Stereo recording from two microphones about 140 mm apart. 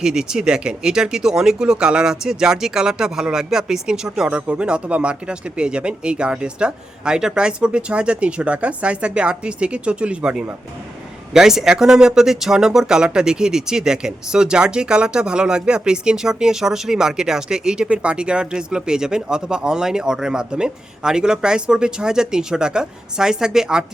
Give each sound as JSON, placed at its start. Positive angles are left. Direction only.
{"t": 0.0, "sound": "speech", "side_deg": -5}